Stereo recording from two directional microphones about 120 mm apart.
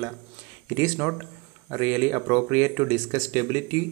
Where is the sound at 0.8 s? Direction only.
20° right (ahead or behind).